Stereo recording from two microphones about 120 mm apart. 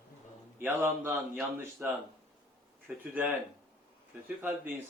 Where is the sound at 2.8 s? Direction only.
15° right (ahead or behind).